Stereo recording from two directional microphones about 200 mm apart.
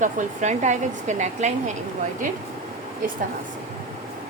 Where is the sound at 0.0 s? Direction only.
40° right (ahead or behind).